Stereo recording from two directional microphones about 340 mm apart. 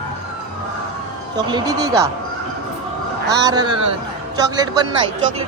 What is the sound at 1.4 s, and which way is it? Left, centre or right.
Speech, centre.